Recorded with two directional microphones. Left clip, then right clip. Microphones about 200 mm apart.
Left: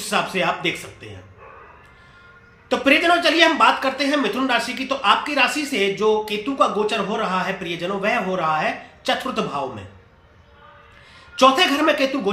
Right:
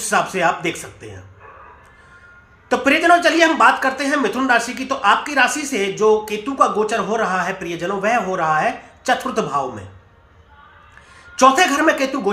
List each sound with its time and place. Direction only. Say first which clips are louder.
0.1 s speech: right 4 dB; 15° right (ahead or behind)
2.6 s a woman's voice: right 3 dB; 20° right (ahead or behind)
11.3 s speech: right 2 dB; 15° right (ahead or behind)